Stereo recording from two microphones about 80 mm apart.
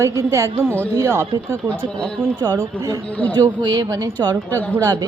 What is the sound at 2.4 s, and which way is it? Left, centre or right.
Speech, right.